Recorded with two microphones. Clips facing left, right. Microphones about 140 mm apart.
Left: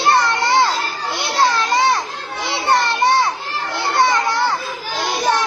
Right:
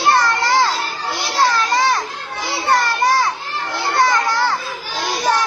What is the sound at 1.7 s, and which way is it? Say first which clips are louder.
Children playing: left 1 dB; 25° left (ahead or behind).